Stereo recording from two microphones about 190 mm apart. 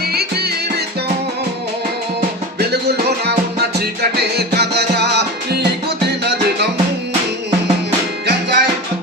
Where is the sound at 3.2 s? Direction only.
60° right (ahead or behind).